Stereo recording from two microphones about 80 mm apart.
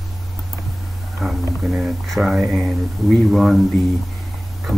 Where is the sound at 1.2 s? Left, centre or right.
Centre.